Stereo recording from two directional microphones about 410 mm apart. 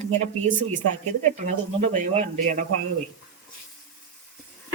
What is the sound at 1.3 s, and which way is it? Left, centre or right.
Speech, centre.